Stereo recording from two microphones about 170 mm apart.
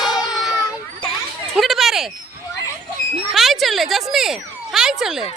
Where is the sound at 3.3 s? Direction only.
Centre (ahead or behind).